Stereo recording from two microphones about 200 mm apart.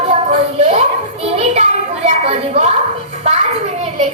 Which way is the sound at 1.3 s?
30° right (ahead or behind).